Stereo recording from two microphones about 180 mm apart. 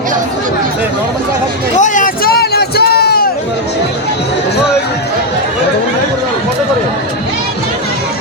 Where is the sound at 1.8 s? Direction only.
45° left (ahead or behind); by 3.2 s 60° left (ahead or behind).